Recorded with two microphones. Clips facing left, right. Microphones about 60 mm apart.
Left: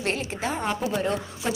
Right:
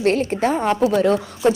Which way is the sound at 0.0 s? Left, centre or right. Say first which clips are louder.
Right 10 dB; right.